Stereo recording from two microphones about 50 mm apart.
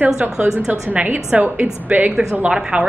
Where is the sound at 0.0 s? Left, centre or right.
Right.